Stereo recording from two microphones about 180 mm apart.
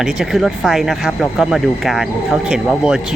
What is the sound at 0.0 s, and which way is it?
Speech, centre (ahead or behind).